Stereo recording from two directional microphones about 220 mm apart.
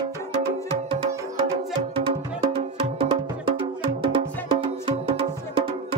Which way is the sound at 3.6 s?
20° right (ahead or behind).